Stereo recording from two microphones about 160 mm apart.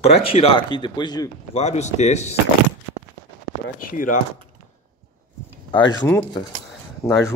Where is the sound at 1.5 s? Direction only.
45° left (ahead or behind).